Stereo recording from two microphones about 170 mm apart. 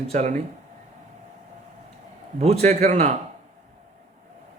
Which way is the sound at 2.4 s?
40° right (ahead or behind).